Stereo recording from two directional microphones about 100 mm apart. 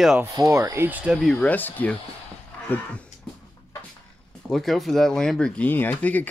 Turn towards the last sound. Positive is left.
turn(degrees=15)  # may be behind; listen again after turning